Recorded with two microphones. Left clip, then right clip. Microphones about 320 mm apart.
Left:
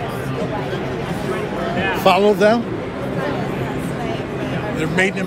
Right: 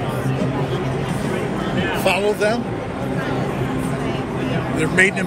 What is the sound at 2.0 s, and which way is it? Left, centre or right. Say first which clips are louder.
Speech: left 5 dB; centre.